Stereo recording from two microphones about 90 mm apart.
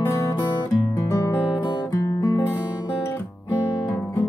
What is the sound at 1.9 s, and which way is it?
Music, 40° left (ahead or behind).